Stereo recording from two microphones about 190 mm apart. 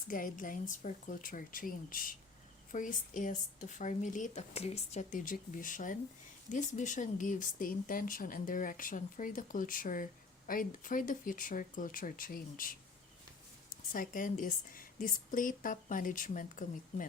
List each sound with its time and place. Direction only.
0.1 s speech: 45° left (ahead or behind)
13.9 s speech: 45° left (ahead or behind)